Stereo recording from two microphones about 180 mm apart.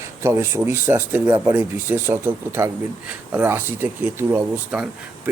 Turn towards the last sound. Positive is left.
turn(degrees=-10)  # may be behind; listen again after turning